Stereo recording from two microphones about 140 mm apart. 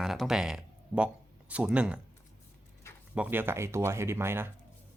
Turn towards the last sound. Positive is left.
turn(degrees=-15)  # may be behind; listen again after turning